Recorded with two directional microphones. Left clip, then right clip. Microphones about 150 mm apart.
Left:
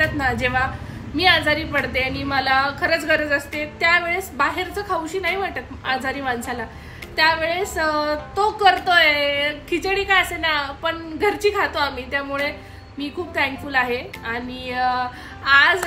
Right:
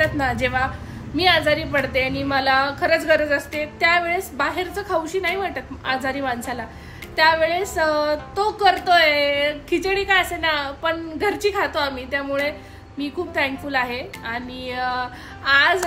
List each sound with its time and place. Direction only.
0.0 s a woman's voice: 30° right (ahead or behind)